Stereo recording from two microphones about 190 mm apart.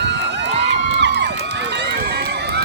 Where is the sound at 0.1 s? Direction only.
65° right (ahead or behind).